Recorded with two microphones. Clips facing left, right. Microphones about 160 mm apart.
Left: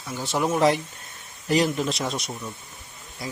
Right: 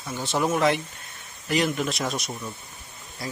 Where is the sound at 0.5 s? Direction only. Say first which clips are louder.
Left 2 dB; 30° left (ahead or behind).